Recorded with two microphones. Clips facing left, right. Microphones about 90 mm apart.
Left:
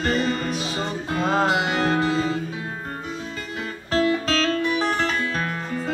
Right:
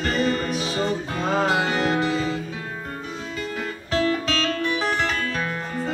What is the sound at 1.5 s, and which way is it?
Music, 35° right (ahead or behind).